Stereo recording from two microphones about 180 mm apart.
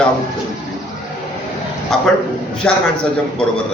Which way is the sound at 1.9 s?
Centre (ahead or behind).